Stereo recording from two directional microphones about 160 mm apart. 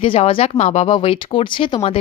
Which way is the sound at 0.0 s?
35° left (ahead or behind).